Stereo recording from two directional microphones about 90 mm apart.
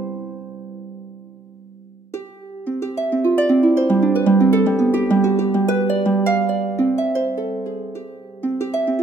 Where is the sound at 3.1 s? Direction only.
20° left (ahead or behind).